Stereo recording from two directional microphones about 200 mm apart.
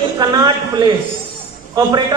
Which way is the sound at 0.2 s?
20° right (ahead or behind).